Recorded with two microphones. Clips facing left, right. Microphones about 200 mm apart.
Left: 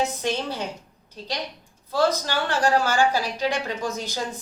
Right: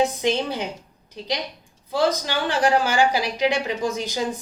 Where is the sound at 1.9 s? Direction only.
15° right (ahead or behind).